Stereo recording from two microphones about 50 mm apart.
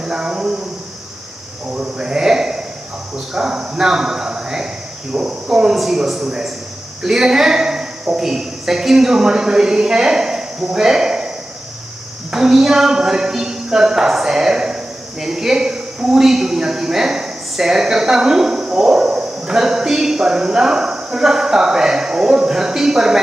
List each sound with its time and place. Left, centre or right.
0.0 s speech: centre
1.7 s a man's voice: centre
12.3 s speech: centre